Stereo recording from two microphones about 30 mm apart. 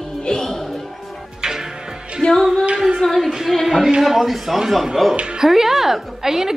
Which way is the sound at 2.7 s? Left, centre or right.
Right.